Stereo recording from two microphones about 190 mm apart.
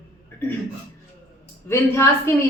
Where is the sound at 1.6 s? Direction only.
15° left (ahead or behind).